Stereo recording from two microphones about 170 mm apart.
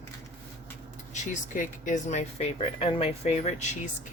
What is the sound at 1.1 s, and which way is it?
Speech, 50° left (ahead or behind).